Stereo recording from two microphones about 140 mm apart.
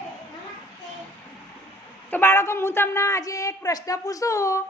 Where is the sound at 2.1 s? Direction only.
15° left (ahead or behind).